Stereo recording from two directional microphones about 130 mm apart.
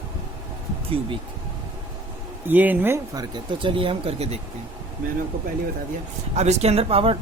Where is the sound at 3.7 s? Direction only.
45° right (ahead or behind).